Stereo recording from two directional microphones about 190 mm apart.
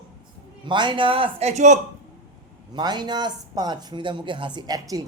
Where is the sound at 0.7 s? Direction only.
25° right (ahead or behind).